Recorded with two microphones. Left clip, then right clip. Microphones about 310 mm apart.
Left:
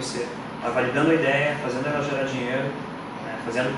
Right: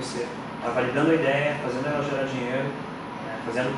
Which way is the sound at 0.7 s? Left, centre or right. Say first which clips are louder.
Left 1 dB; centre.